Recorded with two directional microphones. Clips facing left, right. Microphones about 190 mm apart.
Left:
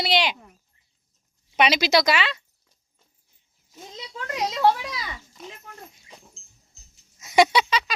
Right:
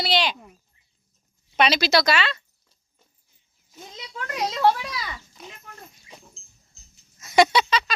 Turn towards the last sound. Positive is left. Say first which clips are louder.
# even
turn(degrees=10)  # may be behind; listen again after turning